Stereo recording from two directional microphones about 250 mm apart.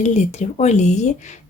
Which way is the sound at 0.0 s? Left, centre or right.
Left.